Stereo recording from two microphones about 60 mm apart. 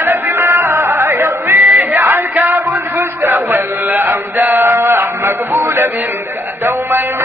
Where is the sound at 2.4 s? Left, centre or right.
Right.